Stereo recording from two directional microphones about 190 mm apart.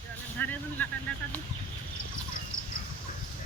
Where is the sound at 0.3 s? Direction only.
10° left (ahead or behind).